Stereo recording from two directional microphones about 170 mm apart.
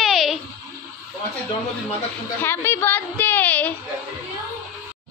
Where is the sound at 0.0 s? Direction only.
Centre (ahead or behind).